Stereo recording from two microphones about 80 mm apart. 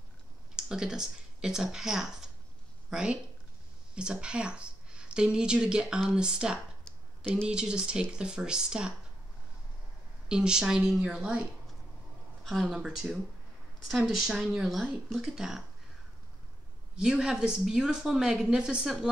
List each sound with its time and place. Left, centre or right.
0.6 s a woman's voice: centre
10.2 s speech: centre
12.4 s speech: centre
16.9 s speech: centre